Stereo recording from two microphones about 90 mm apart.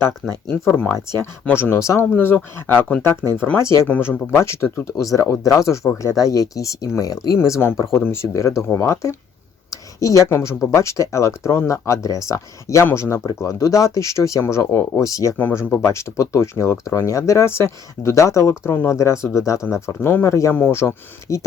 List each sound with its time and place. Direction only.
0.7 s speech: 15° left (ahead or behind); by 2.0 s 30° left (ahead or behind)
2.1 s speech: 20° left (ahead or behind)
3.6 s speech: 35° left (ahead or behind)
3.8 s speech: 20° left (ahead or behind)
4.4 s speech: 30° left (ahead or behind)
7.3 s speech: 30° left (ahead or behind)
9.6 s a sound: 35° left (ahead or behind)
10.2 s speech: 30° left (ahead or behind)